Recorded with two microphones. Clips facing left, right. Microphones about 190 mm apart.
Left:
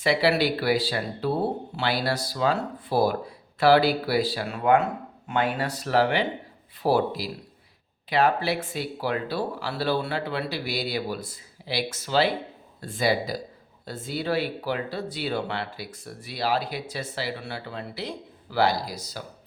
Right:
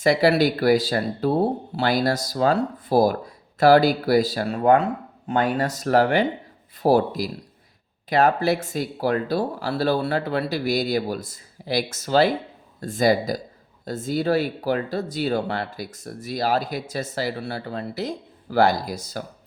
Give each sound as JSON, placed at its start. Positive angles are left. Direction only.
{"t": 0.0, "sound": "speech", "side_deg": -45}